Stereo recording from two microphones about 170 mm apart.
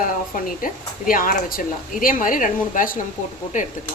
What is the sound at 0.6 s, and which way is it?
Speech, 55° left (ahead or behind).